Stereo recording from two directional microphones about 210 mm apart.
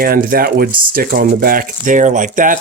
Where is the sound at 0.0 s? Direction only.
45° right (ahead or behind).